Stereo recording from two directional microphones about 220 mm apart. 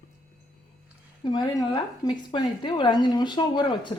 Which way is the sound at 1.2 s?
20° left (ahead or behind).